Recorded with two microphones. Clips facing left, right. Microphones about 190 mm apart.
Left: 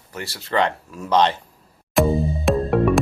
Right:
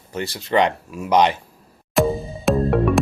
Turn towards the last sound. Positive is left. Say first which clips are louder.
# even
turn(degrees=0)  # may be behind; listen again after turning